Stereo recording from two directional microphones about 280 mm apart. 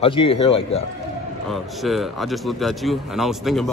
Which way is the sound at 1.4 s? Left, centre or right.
Centre.